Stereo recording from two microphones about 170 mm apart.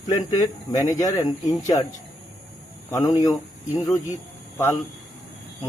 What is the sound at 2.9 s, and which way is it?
Speech, 20° left (ahead or behind).